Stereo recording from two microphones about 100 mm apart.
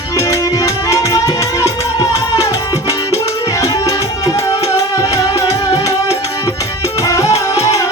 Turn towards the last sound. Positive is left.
turn(degrees=30)  # may be behind; listen again after turning